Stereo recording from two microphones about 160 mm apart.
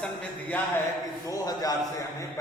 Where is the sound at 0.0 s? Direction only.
10° left (ahead or behind).